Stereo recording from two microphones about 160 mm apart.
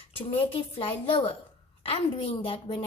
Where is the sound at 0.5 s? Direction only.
35° left (ahead or behind).